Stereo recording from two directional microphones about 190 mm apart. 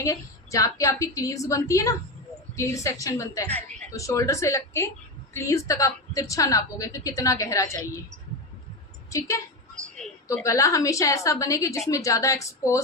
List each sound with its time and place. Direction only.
0.0 s a woman's voice: 15° left (ahead or behind)
9.0 s a woman's voice: 15° left (ahead or behind)